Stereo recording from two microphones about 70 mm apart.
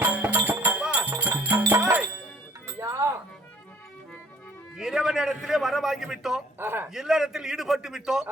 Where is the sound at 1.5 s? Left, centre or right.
Right.